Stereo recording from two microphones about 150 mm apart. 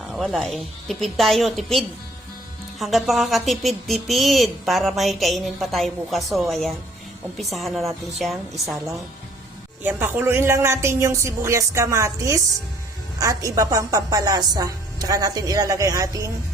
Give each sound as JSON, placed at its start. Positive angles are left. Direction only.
{"t": 0.1, "sound": "speech", "side_deg": 0}
{"t": 9.8, "sound": "a woman's voice", "side_deg": -15}